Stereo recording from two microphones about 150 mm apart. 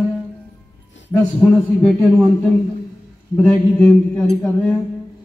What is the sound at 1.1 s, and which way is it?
Speech, 5° left (ahead or behind).